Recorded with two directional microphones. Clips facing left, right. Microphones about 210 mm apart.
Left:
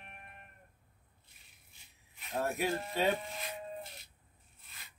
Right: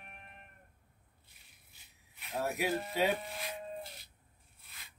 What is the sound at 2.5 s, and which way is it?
Speech, 5° right (ahead or behind).